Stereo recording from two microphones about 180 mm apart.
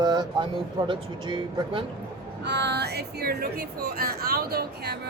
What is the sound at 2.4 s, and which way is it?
Speech, 70° right (ahead or behind).